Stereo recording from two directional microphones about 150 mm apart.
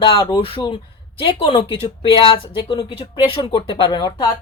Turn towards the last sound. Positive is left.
turn(degrees=30)  # may be behind; listen again after turning